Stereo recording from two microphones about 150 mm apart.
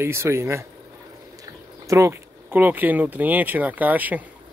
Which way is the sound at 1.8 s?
20° right (ahead or behind).